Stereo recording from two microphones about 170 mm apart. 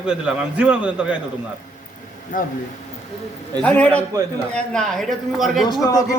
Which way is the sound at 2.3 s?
55° left (ahead or behind).